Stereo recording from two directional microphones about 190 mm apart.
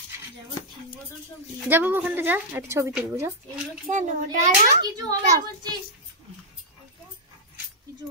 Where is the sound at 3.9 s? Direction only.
40° right (ahead or behind).